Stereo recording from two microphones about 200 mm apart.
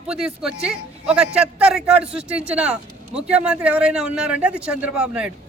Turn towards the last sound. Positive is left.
turn(degrees=-5)  # may be behind; listen again after turning